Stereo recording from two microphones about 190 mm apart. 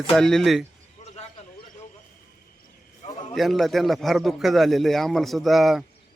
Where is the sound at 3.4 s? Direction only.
Centre (ahead or behind).